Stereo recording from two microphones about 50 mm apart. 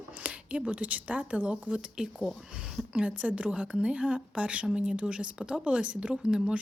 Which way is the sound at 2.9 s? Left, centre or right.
Right.